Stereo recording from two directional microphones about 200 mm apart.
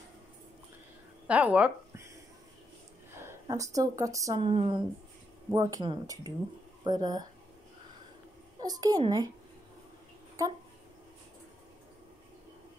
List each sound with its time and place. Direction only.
1.2 s speech: 5° right (ahead or behind)
3.3 s a woman's voice: 15° right (ahead or behind)
4.5 s a child's voice: 25° right (ahead or behind)
5.5 s a child's voice: 15° right (ahead or behind)
8.5 s a child's voice: 20° right (ahead or behind)